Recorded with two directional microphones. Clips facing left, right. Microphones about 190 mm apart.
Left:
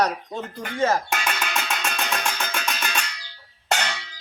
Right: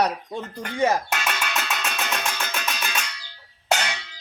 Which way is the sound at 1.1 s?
Centre (ahead or behind).